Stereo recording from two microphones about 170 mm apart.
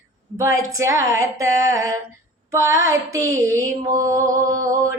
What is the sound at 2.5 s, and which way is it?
Female singing, 20° right (ahead or behind).